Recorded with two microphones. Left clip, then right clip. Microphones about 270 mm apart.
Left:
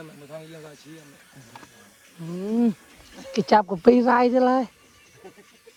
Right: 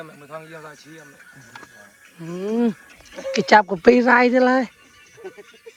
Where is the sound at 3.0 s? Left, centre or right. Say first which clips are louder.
Right 12 dB; left.